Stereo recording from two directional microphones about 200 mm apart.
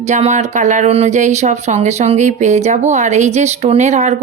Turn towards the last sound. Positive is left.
turn(degrees=-35)  # may be behind; listen again after turning